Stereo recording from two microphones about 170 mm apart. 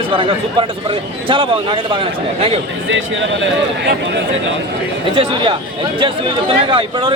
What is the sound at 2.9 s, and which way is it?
A man's voice, 90° right.